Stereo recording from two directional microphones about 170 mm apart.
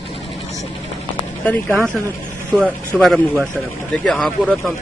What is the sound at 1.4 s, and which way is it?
Speech, 10° left (ahead or behind).